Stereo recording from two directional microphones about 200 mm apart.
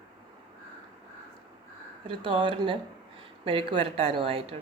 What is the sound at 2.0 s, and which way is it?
Speech, 25° right (ahead or behind).